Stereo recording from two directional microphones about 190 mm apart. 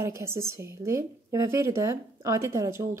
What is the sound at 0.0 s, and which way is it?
A woman's voice, 15° right (ahead or behind).